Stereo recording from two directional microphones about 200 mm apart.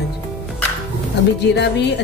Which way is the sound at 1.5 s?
60° left (ahead or behind).